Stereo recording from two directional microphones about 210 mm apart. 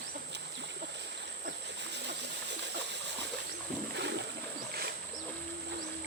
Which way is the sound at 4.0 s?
55° right (ahead or behind).